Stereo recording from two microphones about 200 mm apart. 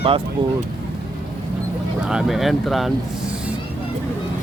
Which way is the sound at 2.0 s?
Centre (ahead or behind).